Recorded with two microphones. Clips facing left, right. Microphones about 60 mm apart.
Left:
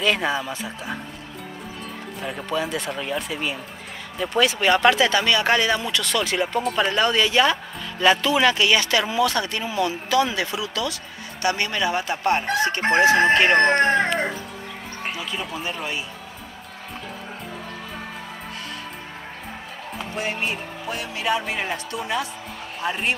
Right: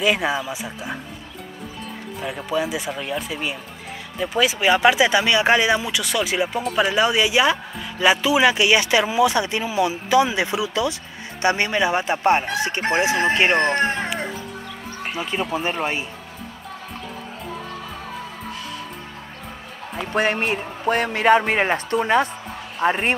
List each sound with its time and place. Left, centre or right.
0.0 s speech: centre
2.2 s speech: centre
15.1 s speech: right
20.0 s a man's voice: right